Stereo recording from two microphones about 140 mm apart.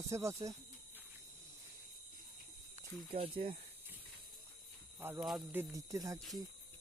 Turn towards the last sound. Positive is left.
turn(degrees=-25)  # may be behind; listen again after turning